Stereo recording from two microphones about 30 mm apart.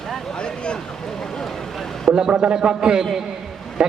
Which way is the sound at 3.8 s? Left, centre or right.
Right.